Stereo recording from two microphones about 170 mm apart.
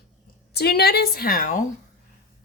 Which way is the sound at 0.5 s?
70° left (ahead or behind).